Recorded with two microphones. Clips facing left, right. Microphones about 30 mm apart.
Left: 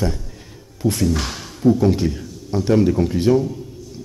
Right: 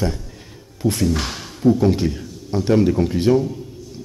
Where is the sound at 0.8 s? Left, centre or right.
Right.